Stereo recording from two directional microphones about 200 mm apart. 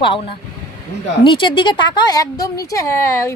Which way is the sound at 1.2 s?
25° left (ahead or behind).